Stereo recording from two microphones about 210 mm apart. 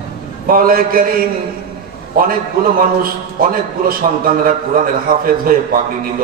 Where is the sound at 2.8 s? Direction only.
45° right (ahead or behind).